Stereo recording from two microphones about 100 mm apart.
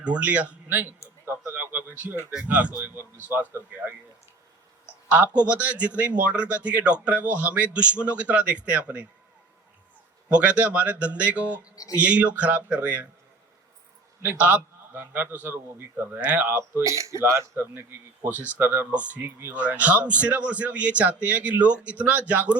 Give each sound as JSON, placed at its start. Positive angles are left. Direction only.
{"t": 0.0, "sound": "speech", "side_deg": -15}
{"t": 1.2, "sound": "a sound", "side_deg": -25}
{"t": 2.4, "sound": "a man's voice", "side_deg": -15}
{"t": 5.0, "sound": "speech", "side_deg": -15}
{"t": 10.2, "sound": "speech", "side_deg": -10}
{"t": 14.2, "sound": "a man's voice", "side_deg": -15}